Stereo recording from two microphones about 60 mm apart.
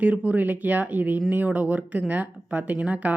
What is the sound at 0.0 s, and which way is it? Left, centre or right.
Speech, right.